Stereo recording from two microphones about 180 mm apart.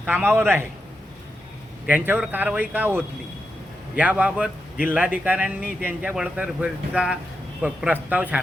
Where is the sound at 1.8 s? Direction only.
10° right (ahead or behind).